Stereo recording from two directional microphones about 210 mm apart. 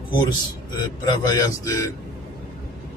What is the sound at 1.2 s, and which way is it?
Speech, 15° left (ahead or behind).